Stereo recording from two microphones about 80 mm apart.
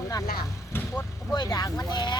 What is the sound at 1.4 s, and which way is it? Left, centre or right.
Speech, left.